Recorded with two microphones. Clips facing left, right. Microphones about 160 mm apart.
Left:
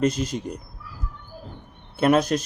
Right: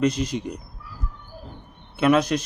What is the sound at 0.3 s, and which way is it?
Speech, 45° left (ahead or behind).